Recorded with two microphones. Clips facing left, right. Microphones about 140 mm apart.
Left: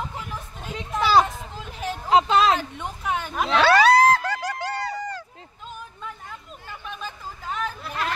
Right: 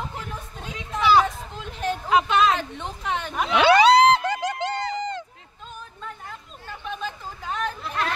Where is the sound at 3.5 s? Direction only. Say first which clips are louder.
Right 1 dB; 20° right (ahead or behind).